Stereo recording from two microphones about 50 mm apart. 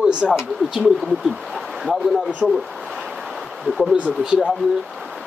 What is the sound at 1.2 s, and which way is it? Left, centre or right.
Speech, centre.